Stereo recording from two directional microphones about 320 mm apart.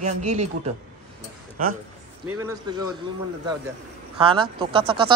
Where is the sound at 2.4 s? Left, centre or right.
Centre.